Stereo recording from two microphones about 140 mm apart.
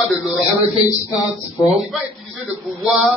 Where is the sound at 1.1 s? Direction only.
30° left (ahead or behind).